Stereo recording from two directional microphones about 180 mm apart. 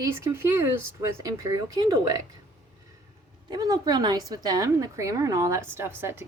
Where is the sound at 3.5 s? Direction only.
20° right (ahead or behind).